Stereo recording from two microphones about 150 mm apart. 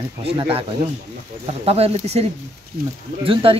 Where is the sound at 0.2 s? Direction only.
40° right (ahead or behind).